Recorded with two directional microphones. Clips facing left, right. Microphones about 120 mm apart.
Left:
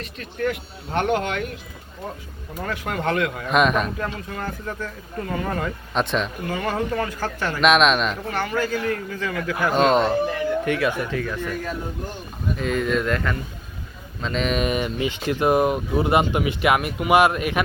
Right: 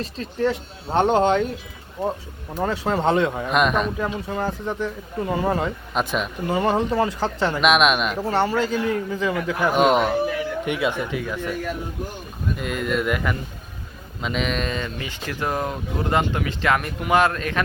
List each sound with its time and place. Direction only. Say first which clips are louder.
0.0 s speech: right 3 dB; 25° right (ahead or behind)
2.6 s speech: right 4 dB; 30° right (ahead or behind)
3.4 s speech: left 1 dB; centre (ahead or behind)
4.0 s speech: right 4 dB; 15° right (ahead or behind)
5.9 s speech: left 4 dB; 5° right (ahead or behind)
6.4 s speech: right 4 dB; 25° right (ahead or behind)
7.6 s speech: left 2 dB; 5° right (ahead or behind)
8.2 s speech: right 4 dB; 30° right (ahead or behind); by 10.3 s 5° right (ahead or behind)
10.7 s speech: left 1 dB; 20° right (ahead or behind); by 14.6 s centre (ahead or behind)
14.6 s speech: left 5 dB; 15° left (ahead or behind)